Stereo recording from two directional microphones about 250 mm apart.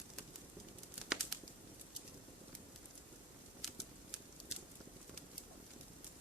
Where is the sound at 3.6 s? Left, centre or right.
Centre.